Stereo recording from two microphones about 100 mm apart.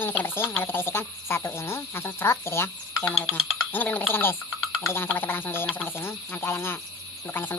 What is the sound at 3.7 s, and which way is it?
Speech, 20° left (ahead or behind).